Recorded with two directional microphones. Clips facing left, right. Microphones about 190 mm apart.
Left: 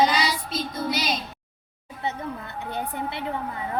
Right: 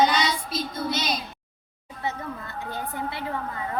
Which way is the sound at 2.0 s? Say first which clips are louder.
Left 1 dB; 20° left (ahead or behind).